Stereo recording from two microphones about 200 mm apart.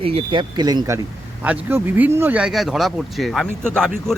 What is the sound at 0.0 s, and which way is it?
Speech, 30° right (ahead or behind).